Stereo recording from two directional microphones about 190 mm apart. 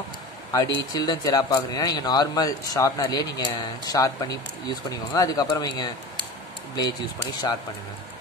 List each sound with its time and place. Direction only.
0.5 s speech: 20° left (ahead or behind)
6.8 s speech: 20° left (ahead or behind)